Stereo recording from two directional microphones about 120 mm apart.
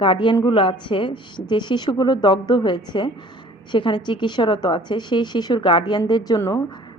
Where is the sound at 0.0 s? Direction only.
40° left (ahead or behind).